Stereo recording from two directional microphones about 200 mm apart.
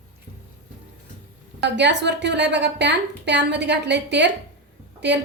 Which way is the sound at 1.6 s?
60° right (ahead or behind).